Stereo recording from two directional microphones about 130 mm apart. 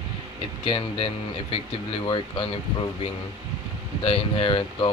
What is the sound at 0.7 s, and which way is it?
Speech, 40° left (ahead or behind).